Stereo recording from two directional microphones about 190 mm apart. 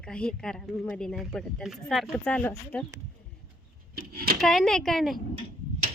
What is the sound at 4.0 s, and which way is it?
Speech, 55° right (ahead or behind).